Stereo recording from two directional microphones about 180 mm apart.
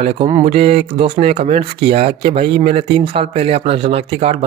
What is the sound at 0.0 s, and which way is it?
A man's voice, 30° right (ahead or behind).